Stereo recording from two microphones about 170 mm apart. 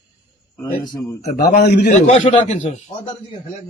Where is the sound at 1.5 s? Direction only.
75° left (ahead or behind).